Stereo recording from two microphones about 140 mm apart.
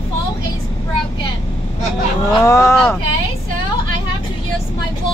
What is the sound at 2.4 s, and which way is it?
Speech, 20° left (ahead or behind).